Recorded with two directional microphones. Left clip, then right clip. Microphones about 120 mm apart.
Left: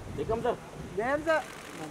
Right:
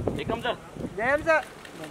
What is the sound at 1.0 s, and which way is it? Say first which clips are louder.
Speech: right 5 dB; 40° right (ahead or behind).